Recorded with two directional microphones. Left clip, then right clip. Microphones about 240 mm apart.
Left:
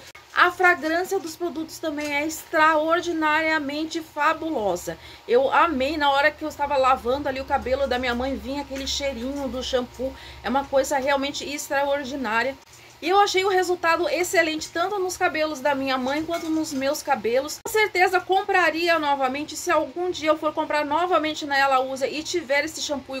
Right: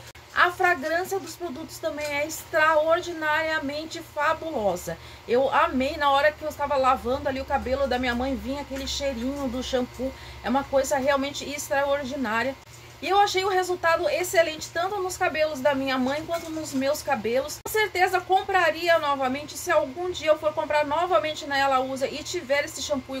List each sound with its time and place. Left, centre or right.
0.3 s a woman's voice: centre